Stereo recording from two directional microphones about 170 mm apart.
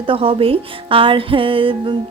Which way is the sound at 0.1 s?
30° right (ahead or behind).